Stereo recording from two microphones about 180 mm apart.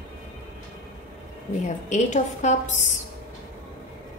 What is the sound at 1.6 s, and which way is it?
Speech, 40° left (ahead or behind).